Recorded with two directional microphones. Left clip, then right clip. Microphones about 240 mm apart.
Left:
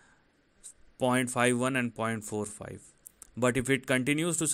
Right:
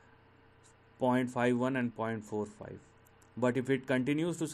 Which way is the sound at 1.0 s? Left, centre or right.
Left.